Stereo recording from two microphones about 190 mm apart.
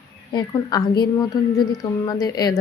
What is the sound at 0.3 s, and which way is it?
A woman's voice, 20° left (ahead or behind).